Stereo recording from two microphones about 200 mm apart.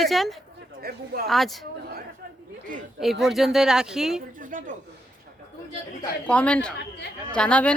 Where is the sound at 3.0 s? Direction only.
Centre (ahead or behind).